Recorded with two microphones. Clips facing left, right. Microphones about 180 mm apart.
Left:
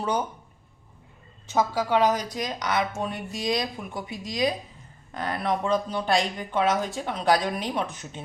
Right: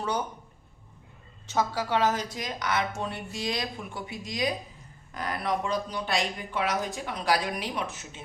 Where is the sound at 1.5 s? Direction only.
15° left (ahead or behind).